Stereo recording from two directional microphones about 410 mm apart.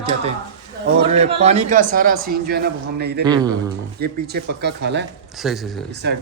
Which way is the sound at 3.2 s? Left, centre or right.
Centre.